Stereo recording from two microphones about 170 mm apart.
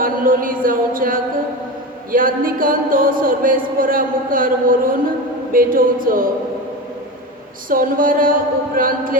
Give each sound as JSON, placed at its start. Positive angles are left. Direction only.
{"t": 0.0, "sound": "a sound", "side_deg": -55}
{"t": 2.1, "sound": "speech", "side_deg": -55}
{"t": 7.7, "sound": "speech", "side_deg": -55}